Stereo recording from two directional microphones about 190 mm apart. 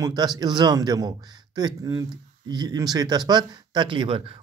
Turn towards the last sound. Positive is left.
turn(degrees=-25)  # may be behind; listen again after turning